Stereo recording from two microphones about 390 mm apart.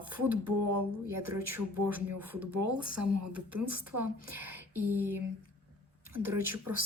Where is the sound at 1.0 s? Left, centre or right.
Right.